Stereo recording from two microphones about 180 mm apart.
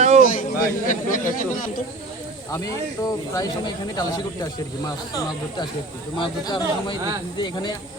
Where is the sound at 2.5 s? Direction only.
20° left (ahead or behind).